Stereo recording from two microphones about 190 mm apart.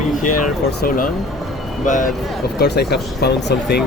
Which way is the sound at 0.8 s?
45° left (ahead or behind).